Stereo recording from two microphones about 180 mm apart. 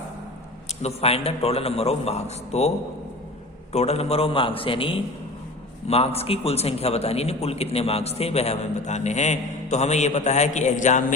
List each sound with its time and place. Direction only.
0.8 s a man's voice: 35° left (ahead or behind)